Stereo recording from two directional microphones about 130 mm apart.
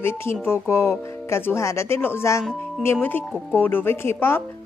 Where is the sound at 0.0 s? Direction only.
20° left (ahead or behind).